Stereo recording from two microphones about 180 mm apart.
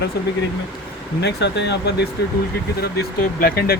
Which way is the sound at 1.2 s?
70° left (ahead or behind).